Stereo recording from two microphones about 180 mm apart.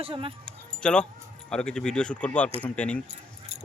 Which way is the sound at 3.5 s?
35° right (ahead or behind).